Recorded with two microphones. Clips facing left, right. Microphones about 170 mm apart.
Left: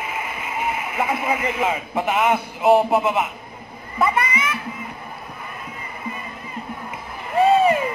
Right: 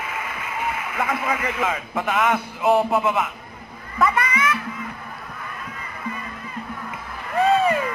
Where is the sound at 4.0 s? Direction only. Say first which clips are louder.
Even; 25° left (ahead or behind).